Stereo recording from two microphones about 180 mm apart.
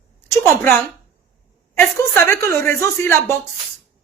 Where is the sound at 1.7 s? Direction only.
15° left (ahead or behind).